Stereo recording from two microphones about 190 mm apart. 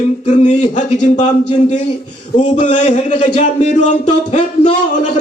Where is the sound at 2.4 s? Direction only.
40° left (ahead or behind).